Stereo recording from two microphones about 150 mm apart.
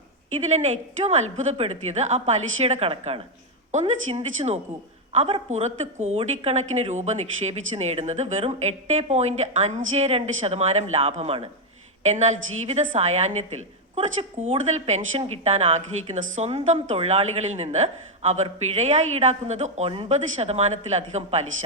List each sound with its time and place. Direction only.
1.0 s speech: 50° right (ahead or behind)
12.0 s speech: 50° right (ahead or behind)